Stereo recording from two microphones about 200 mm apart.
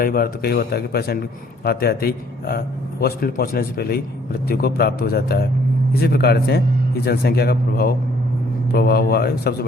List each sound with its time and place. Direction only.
0.0 s a man's voice: 50° left (ahead or behind)